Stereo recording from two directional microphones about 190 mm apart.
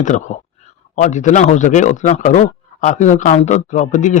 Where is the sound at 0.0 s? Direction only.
40° left (ahead or behind).